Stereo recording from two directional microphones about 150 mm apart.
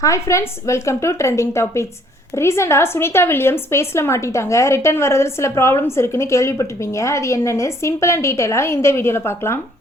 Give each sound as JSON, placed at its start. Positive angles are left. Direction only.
{"t": 0.0, "sound": "a woman's voice", "side_deg": 20}